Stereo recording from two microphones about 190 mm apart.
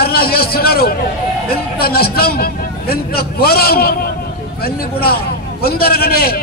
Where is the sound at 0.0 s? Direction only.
55° left (ahead or behind).